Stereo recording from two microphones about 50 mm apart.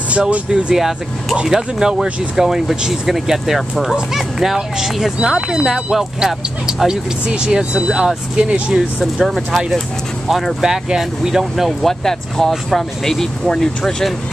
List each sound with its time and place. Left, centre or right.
0.5 s speech: centre
8.7 s speech: centre
12.0 s speech: centre